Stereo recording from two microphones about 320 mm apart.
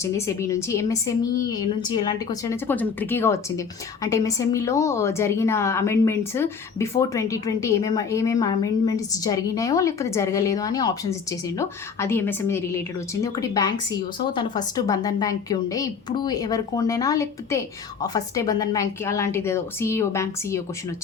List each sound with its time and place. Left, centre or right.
0.0 s a woman's voice: centre